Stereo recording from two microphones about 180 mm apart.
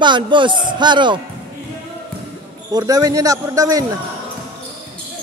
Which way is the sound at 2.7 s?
20° right (ahead or behind).